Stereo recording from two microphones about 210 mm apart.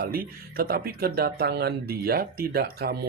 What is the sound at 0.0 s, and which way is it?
Speech, 45° right (ahead or behind).